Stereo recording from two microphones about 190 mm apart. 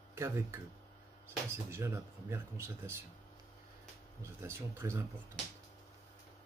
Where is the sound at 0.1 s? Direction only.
15° right (ahead or behind).